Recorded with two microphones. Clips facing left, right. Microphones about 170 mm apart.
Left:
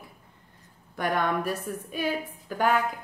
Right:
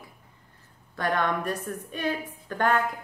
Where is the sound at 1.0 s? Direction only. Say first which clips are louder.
Even; 10° left (ahead or behind).